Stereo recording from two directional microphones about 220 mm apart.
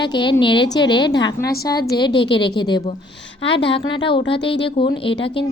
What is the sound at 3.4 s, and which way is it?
Speech, 55° left (ahead or behind).